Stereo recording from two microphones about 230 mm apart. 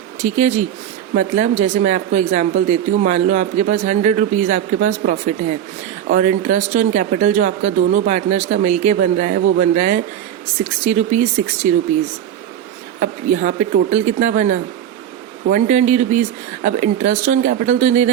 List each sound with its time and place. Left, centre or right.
0.2 s speech: right
13.0 s speech: right